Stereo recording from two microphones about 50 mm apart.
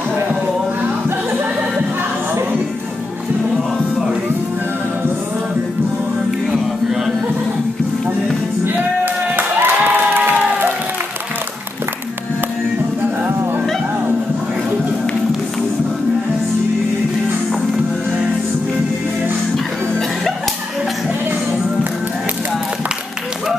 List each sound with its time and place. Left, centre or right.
8.7 s music: right